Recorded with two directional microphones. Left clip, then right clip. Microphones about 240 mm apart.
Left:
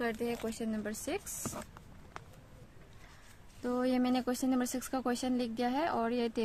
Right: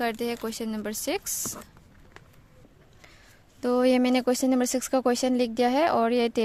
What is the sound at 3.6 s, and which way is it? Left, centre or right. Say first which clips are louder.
Speech: right 10 dB; right.